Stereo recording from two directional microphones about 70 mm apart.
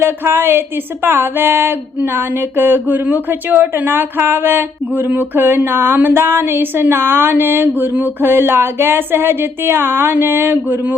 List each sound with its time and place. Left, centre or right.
0.0 s speech: right